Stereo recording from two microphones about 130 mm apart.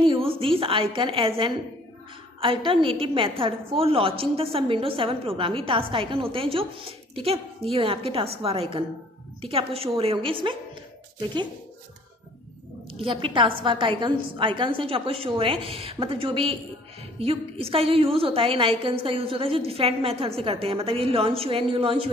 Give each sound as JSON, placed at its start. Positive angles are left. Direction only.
{"t": 0.0, "sound": "a woman's voice", "side_deg": -40}
{"t": 12.9, "sound": "a woman's voice", "side_deg": -45}